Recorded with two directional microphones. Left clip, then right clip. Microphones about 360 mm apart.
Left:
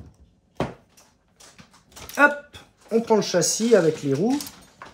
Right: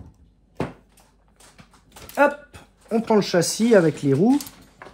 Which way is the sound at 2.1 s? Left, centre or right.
Centre.